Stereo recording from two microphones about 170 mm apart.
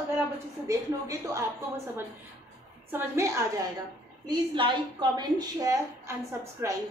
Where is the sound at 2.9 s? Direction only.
15° right (ahead or behind).